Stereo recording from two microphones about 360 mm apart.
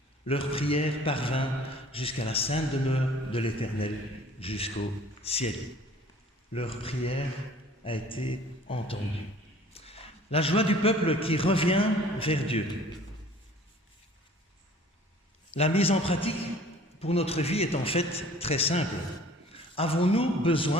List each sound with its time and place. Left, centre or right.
0.3 s a man's voice: centre
6.5 s a man's voice: centre
15.5 s a man's voice: centre